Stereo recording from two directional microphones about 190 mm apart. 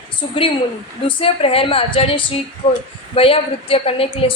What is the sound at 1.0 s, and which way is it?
A woman's voice, 30° left (ahead or behind).